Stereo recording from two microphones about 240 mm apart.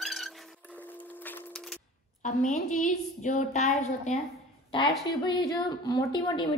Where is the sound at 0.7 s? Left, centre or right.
Centre.